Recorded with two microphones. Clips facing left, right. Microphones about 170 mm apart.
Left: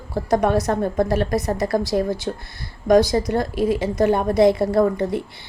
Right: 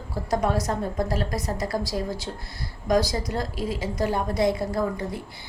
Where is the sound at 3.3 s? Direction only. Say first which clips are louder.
Left 8 dB; 60° left (ahead or behind).